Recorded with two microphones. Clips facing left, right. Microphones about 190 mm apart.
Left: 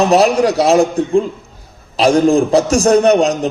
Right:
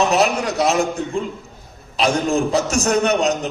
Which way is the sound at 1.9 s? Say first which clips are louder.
Left 8 dB; 35° left (ahead or behind).